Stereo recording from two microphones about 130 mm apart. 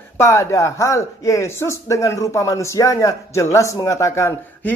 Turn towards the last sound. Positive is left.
turn(degrees=20)  # may be behind; listen again after turning